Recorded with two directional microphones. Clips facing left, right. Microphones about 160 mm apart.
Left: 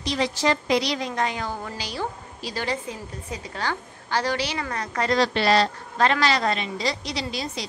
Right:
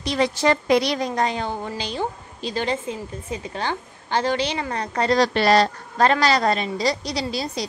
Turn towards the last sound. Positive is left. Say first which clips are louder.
# right 4 dB
turn(degrees=-35)  # may be behind; listen again after turning